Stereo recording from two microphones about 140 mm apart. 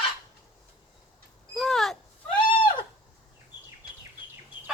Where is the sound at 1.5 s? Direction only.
Centre (ahead or behind).